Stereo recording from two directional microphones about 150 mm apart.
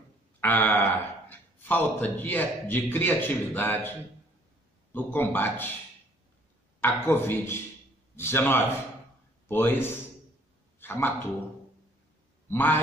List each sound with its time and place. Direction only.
0.4 s a sound: 10° left (ahead or behind)
1.3 s a man's voice: 15° left (ahead or behind)
4.9 s a man's voice: 15° left (ahead or behind)
6.8 s a man's voice: 15° left (ahead or behind)
12.4 s a man's voice: 15° left (ahead or behind)